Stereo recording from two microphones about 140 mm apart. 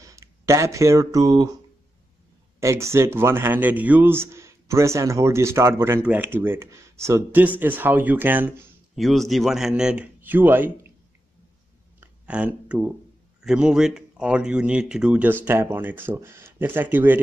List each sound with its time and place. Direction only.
0.0 s speech: 20° right (ahead or behind)
2.6 s speech: 20° right (ahead or behind)
8.9 s speech: centre (ahead or behind)
12.0 s a sound: 10° right (ahead or behind)
13.4 s speech: 5° right (ahead or behind)